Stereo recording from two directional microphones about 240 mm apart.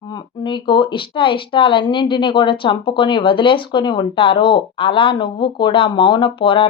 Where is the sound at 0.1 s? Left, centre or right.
Centre.